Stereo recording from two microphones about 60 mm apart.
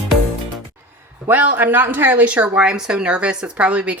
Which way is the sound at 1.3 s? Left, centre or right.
Right.